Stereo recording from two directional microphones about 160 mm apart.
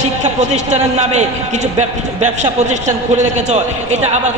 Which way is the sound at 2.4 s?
45° right (ahead or behind).